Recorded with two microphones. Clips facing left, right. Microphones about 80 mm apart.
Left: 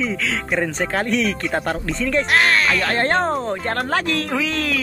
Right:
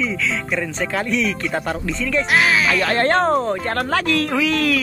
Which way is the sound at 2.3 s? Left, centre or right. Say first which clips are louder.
Right 1 dB; centre.